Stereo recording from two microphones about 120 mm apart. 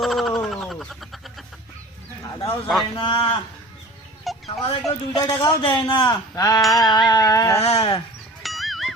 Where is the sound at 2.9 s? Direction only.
45° left (ahead or behind).